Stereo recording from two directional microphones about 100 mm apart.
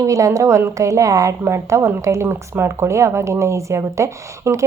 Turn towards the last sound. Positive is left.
turn(degrees=-30)  # may be behind; listen again after turning